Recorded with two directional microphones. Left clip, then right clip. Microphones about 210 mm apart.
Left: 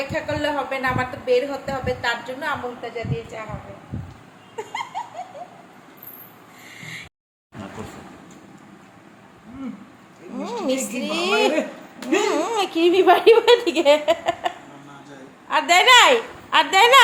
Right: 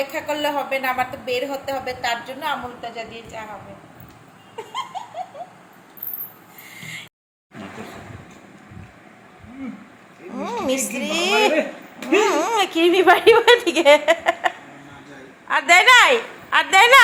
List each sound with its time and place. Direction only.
0.1 s a woman's voice: centre (ahead or behind)
10.3 s a woman's voice: centre (ahead or behind)